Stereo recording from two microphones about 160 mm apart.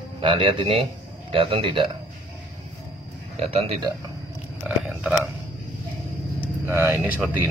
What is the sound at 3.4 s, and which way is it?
Speech, 40° right (ahead or behind).